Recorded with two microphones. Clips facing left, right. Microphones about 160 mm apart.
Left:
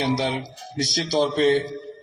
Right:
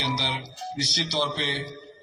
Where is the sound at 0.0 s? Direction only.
45° left (ahead or behind).